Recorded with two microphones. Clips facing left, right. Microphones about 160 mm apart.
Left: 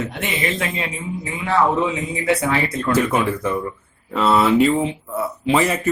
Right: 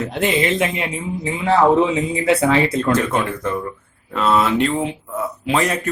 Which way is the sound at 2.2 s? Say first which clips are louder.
Right 3 dB; 25° right (ahead or behind).